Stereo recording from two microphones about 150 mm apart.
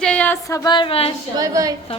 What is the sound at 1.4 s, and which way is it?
Speech, 20° right (ahead or behind).